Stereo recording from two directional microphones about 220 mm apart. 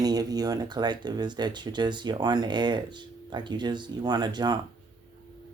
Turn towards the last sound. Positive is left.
turn(degrees=-20)  # may be behind; listen again after turning